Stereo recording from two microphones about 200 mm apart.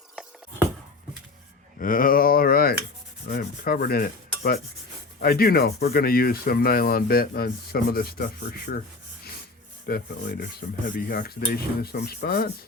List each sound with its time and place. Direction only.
1.8 s speech: 45° left (ahead or behind)
3.2 s rub: 50° left (ahead or behind)
5.2 s speech: 50° left (ahead or behind)
9.8 s speech: 50° left (ahead or behind)